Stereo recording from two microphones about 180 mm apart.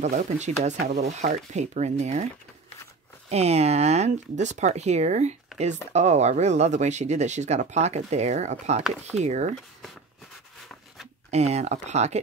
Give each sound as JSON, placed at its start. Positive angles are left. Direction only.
{"t": 0.0, "sound": "speech", "side_deg": -40}
{"t": 3.3, "sound": "speech", "side_deg": -35}
{"t": 5.5, "sound": "a sound", "side_deg": 0}
{"t": 5.9, "sound": "speech", "side_deg": -40}
{"t": 11.2, "sound": "speech", "side_deg": -35}